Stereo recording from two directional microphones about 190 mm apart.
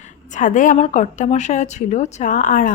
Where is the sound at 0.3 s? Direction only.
45° left (ahead or behind).